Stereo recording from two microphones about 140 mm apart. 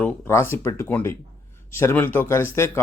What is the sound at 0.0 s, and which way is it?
Speech, 20° left (ahead or behind).